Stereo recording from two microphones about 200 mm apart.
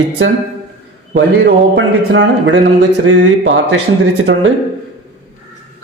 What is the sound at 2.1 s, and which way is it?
Speech, 65° right (ahead or behind).